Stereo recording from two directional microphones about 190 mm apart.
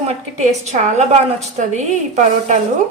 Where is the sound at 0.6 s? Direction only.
35° right (ahead or behind).